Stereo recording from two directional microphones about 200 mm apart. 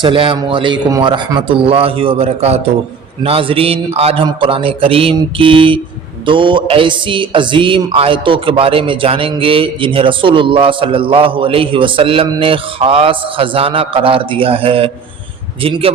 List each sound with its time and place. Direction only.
0.0 s a man's voice: 25° right (ahead or behind)